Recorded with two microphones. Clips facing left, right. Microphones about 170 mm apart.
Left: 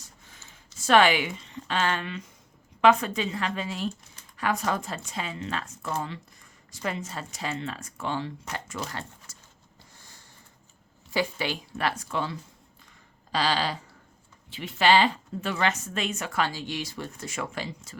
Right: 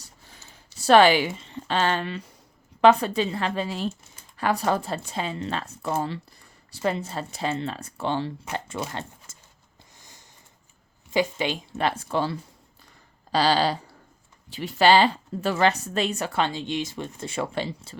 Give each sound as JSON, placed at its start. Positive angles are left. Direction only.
{"t": 0.3, "sound": "speech", "side_deg": -35}
{"t": 10.0, "sound": "a sound", "side_deg": -20}
{"t": 11.1, "sound": "speech", "side_deg": -20}